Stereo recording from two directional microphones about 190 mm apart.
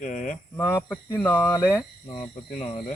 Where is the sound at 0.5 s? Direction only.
15° left (ahead or behind).